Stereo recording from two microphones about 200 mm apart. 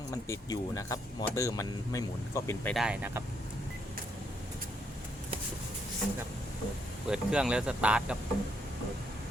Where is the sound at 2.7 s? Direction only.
5° right (ahead or behind).